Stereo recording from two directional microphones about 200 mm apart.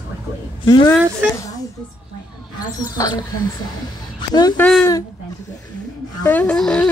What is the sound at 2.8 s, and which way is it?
Speech, 20° left (ahead or behind).